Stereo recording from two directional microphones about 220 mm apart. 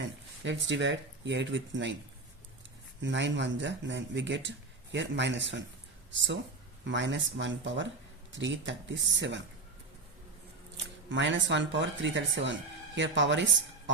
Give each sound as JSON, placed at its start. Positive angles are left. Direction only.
{"t": 0.0, "sound": "speech", "side_deg": -55}
{"t": 3.0, "sound": "speech", "side_deg": -55}
{"t": 11.1, "sound": "speech", "side_deg": -55}